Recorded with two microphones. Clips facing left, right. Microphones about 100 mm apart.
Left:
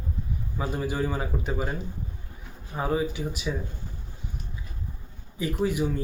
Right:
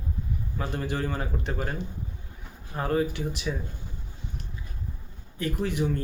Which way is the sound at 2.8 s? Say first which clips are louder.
Even; 5° left (ahead or behind).